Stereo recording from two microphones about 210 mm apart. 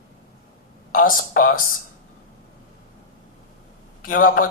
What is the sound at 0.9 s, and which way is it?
Speech, 40° left (ahead or behind).